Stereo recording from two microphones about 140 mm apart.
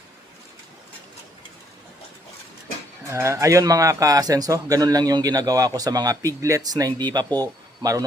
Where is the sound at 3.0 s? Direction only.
20° right (ahead or behind).